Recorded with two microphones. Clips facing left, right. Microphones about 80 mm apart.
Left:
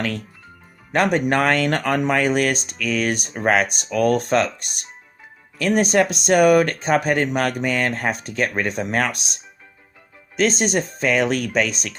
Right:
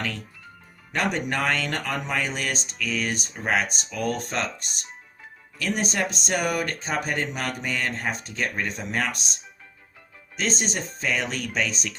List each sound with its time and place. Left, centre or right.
0.9 s speech: left